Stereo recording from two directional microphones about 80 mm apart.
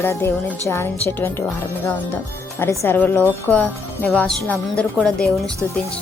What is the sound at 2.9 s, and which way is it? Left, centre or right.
A woman's voice, left.